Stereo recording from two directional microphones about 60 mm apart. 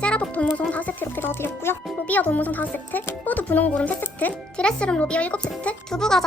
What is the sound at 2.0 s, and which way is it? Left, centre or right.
Speech, left.